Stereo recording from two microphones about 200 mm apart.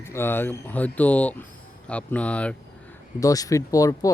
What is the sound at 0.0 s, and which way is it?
Speech, 10° left (ahead or behind).